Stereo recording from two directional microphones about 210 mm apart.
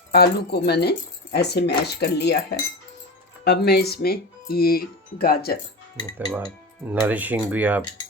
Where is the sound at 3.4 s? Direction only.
50° left (ahead or behind).